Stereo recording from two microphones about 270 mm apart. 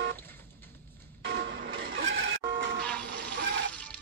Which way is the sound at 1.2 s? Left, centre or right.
Right.